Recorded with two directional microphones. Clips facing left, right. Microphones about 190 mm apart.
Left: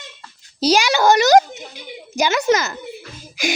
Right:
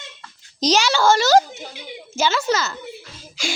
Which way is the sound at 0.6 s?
10° left (ahead or behind).